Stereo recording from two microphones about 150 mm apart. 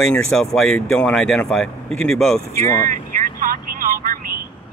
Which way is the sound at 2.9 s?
65° right (ahead or behind).